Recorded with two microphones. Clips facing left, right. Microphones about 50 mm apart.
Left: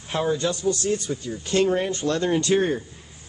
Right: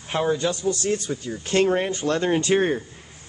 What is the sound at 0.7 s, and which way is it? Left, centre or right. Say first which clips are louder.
Speech: even; right.